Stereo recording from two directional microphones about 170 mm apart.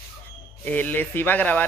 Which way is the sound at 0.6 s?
10° left (ahead or behind).